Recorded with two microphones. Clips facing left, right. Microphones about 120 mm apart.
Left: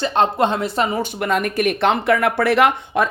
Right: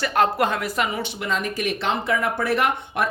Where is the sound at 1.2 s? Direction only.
60° left (ahead or behind); by 2.7 s 90° left.